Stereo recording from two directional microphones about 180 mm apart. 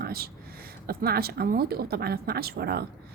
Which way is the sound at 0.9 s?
60° right (ahead or behind).